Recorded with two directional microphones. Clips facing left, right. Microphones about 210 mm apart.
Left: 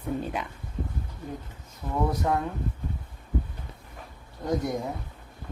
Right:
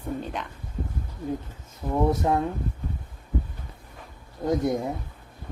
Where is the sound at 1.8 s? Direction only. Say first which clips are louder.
Right 4 dB; 20° right (ahead or behind).